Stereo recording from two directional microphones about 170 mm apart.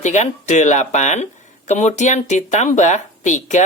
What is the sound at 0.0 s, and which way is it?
Speech, 45° left (ahead or behind).